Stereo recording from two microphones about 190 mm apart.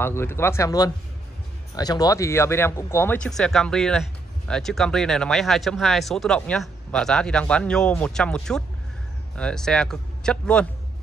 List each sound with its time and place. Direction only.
0.0 s speech: 10° left (ahead or behind)